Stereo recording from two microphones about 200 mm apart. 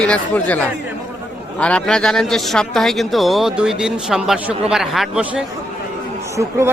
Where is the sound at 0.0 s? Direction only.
5° left (ahead or behind).